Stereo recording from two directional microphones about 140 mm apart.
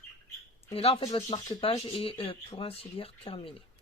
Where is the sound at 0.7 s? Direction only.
45° left (ahead or behind).